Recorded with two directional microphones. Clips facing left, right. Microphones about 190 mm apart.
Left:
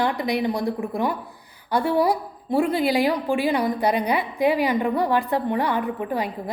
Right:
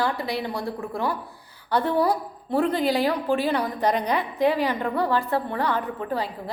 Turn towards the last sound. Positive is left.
turn(degrees=15)  # may be behind; listen again after turning